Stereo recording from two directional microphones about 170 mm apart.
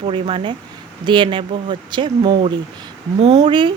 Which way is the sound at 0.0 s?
30° right (ahead or behind).